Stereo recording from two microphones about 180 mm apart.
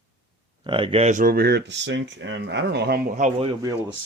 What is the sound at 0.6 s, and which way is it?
Speech, 30° right (ahead or behind).